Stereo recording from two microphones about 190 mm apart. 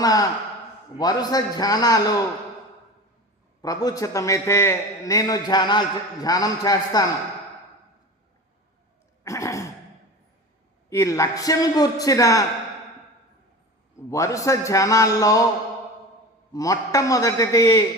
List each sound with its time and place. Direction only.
0.0 s a man's voice: 20° left (ahead or behind)
3.6 s a man's voice: 20° left (ahead or behind)
9.2 s throat clearing: 15° left (ahead or behind)
10.8 s a man's voice: 15° left (ahead or behind)
14.1 s a man's voice: 15° left (ahead or behind)
16.5 s a man's voice: 20° left (ahead or behind)